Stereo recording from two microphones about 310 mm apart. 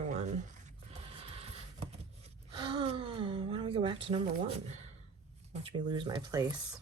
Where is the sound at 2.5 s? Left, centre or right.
Centre.